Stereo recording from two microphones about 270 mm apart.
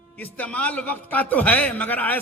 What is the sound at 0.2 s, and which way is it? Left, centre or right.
A man's voice, centre.